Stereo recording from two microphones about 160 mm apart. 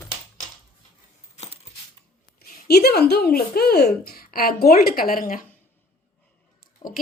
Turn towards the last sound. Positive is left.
turn(degrees=25)  # may be behind; listen again after turning